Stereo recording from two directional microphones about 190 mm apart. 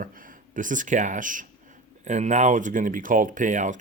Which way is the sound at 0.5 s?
45° right (ahead or behind).